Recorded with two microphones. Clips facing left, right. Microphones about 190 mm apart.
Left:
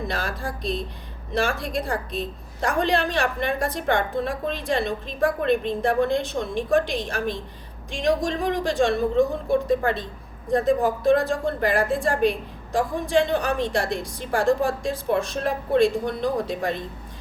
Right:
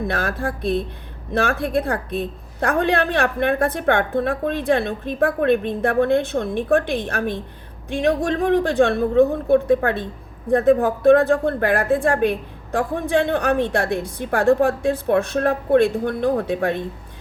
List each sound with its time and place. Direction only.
0.1 s speech: 60° right (ahead or behind)